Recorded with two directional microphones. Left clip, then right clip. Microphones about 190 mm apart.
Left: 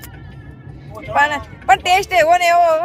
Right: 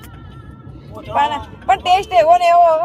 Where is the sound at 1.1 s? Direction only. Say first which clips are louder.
Left 1 dB; 25° left (ahead or behind).